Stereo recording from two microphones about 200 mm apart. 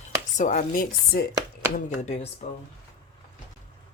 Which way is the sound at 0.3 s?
40° left (ahead or behind).